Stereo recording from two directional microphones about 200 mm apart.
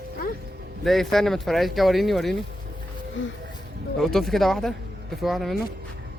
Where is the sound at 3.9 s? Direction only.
Centre (ahead or behind).